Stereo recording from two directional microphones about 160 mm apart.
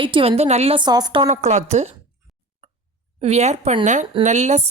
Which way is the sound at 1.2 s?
45° right (ahead or behind).